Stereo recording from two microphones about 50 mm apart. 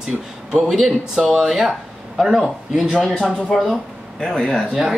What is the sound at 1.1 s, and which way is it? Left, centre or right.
Speech, centre.